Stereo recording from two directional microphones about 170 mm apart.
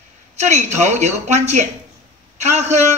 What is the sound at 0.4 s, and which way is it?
A man's voice, 40° right (ahead or behind).